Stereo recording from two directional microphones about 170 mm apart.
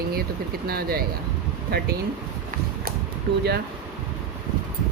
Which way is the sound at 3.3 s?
70° right (ahead or behind).